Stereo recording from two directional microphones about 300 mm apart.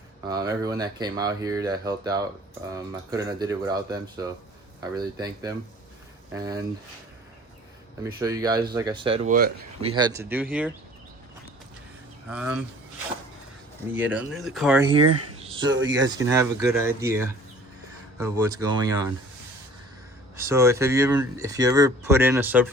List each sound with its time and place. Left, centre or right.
0.3 s speech: centre
8.0 s speech: centre
9.9 s speech: centre
12.3 s speech: centre
13.9 s speech: centre
14.9 s speech: right
15.4 s a sound: centre
16.0 s speech: centre
20.3 s speech: centre